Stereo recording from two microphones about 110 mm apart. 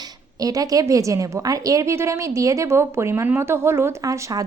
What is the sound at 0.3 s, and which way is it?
A woman's voice, 35° right (ahead or behind).